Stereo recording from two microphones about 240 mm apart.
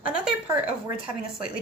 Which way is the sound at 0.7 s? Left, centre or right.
Centre.